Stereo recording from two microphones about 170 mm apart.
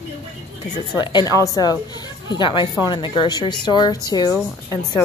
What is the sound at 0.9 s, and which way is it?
A woman's voice, 25° left (ahead or behind).